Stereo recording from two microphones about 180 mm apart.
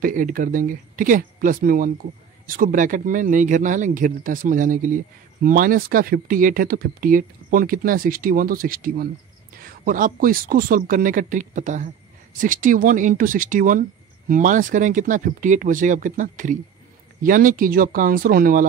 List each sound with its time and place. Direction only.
0.0 s speech: 50° right (ahead or behind)